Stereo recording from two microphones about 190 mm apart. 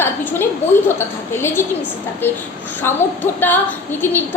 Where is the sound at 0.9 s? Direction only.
10° left (ahead or behind).